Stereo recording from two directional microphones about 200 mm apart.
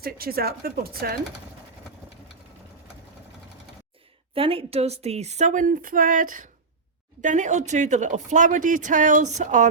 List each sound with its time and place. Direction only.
0.0 s speech: 50° right (ahead or behind)
4.4 s speech: 25° right (ahead or behind)